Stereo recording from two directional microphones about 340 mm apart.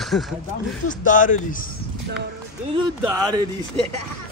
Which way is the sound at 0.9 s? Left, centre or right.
Left.